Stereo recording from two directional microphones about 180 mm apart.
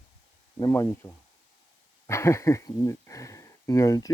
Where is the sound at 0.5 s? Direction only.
15° left (ahead or behind).